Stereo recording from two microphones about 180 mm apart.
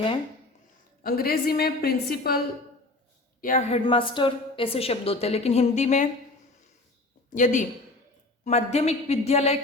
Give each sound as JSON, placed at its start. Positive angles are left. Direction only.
{"t": 1.0, "sound": "a woman's voice", "side_deg": 55}
{"t": 3.4, "sound": "a woman's voice", "side_deg": 45}
{"t": 3.8, "sound": "a woman's voice", "side_deg": 30}
{"t": 7.3, "sound": "a woman's voice", "side_deg": 45}